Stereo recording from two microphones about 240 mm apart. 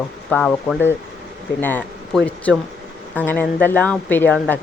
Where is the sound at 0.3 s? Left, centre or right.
Centre.